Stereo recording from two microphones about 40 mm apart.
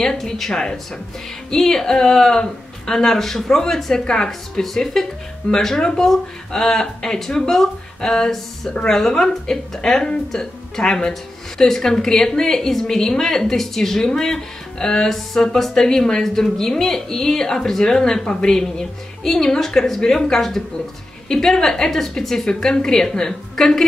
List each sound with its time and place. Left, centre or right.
0.0 s a woman's voice: centre
8.0 s a woman's voice: left